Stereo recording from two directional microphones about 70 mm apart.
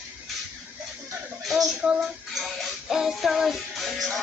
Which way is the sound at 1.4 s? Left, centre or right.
Centre.